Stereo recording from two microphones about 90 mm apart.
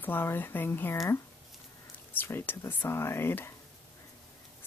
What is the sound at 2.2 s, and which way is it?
Speech, 25° left (ahead or behind).